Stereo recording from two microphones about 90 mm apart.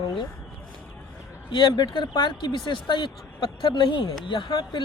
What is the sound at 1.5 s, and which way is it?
Speech, 60° left (ahead or behind).